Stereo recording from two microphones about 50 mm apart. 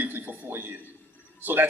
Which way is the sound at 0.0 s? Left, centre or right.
Right.